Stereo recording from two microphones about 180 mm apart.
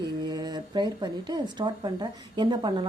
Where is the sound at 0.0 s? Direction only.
20° right (ahead or behind).